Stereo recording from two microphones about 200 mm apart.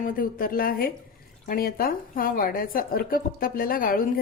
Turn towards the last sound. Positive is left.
turn(degrees=45)  # may be behind; listen again after turning